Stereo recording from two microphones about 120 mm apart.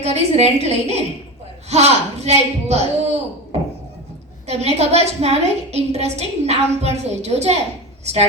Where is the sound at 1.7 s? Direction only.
65° right (ahead or behind).